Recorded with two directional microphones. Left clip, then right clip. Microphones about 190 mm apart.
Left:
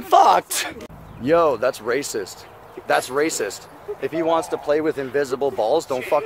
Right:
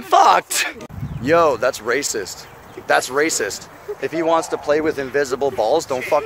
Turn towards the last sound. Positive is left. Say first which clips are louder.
# right 2 dB
turn(degrees=-10)  # may be behind; listen again after turning